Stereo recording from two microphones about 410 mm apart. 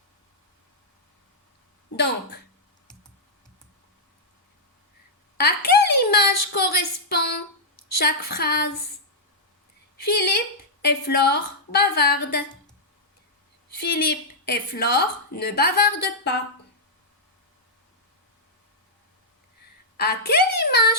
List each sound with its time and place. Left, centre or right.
5.4 s a sound: left
6.0 s child singing: left
6.5 s a sound: left
7.9 s a woman's voice: left
10.0 s a woman's voice: left
14.1 s a woman's voice: left
20.0 s a woman's voice: left